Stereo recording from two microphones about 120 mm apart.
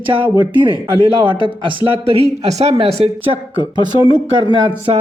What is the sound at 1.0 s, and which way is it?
A man's voice, 45° right (ahead or behind).